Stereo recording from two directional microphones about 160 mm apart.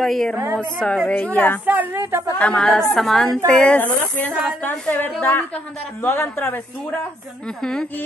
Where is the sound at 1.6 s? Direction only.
10° right (ahead or behind).